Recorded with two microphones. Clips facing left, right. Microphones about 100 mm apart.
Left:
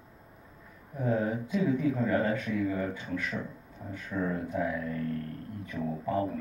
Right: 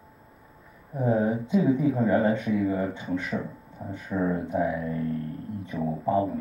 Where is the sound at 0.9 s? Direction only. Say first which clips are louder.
Right 5 dB; 25° right (ahead or behind).